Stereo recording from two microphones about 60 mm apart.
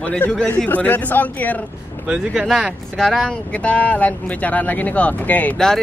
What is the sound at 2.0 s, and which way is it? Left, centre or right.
Speech, centre.